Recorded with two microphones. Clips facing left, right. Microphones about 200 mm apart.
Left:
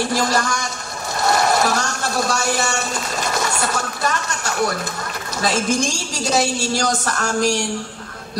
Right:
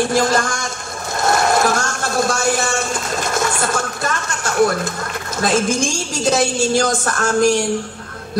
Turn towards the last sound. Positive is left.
turn(degrees=-50)  # may be behind; listen again after turning